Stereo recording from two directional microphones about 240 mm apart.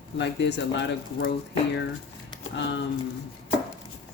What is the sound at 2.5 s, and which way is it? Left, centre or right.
Speech, left.